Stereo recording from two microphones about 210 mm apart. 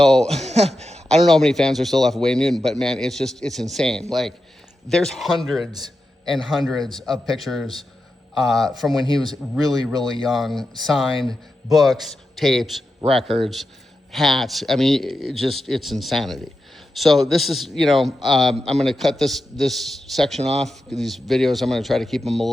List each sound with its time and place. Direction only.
0.0 s a man's voice: 5° left (ahead or behind)
0.3 s speech: 30° right (ahead or behind)
1.2 s a man's voice: centre (ahead or behind)
13.0 s speech: 25° right (ahead or behind)
14.1 s a man's voice: centre (ahead or behind)
20.4 s speech: 30° right (ahead or behind)
21.0 s a man's voice: centre (ahead or behind)